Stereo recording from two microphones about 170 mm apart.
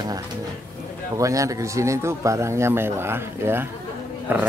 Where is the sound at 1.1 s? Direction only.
20° right (ahead or behind).